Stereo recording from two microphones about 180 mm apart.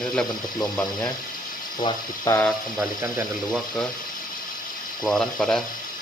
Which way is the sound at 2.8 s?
15° right (ahead or behind).